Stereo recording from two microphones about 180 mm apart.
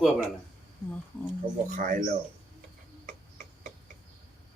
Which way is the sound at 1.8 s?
45° right (ahead or behind).